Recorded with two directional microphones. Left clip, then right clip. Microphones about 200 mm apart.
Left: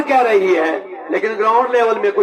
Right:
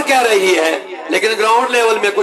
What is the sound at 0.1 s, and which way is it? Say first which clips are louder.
A man's voice: right 1 dB; 40° right (ahead or behind).